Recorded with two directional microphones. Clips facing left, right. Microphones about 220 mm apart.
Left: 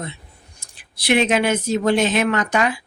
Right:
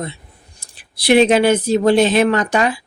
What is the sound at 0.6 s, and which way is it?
A woman's voice, 35° right (ahead or behind).